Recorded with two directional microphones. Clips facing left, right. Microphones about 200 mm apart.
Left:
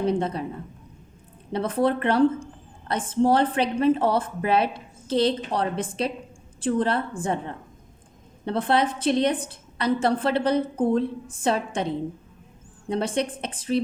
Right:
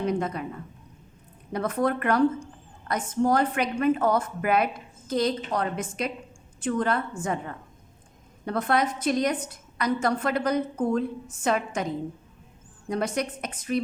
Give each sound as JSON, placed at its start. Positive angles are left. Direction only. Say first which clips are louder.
{"t": 0.0, "sound": "a woman's voice", "louder": "left 3 dB", "side_deg": 30}
{"t": 1.5, "sound": "a woman's voice", "louder": "left 3 dB", "side_deg": 30}